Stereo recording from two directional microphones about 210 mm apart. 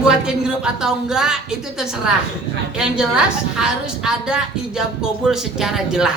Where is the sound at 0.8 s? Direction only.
5° right (ahead or behind).